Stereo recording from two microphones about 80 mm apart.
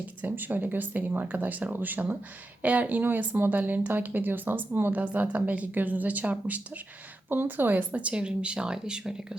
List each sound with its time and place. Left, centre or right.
0.0 s speech: centre